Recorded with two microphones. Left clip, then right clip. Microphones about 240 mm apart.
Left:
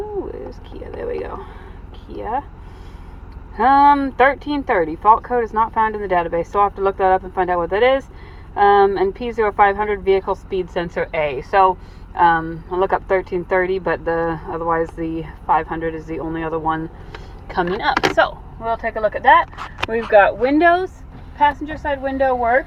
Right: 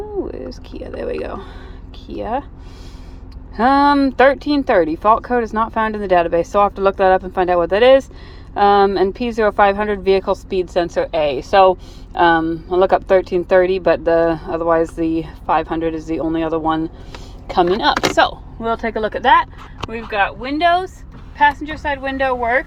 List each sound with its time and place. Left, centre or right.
0.9 s speech: right
3.6 s speech: right
19.3 s speech: centre
21.3 s a woman's voice: centre